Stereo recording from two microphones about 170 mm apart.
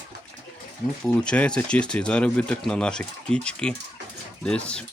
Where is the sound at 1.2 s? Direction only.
5° left (ahead or behind).